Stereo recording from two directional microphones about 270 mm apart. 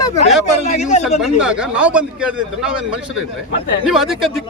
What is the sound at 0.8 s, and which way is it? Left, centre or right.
Speech, left.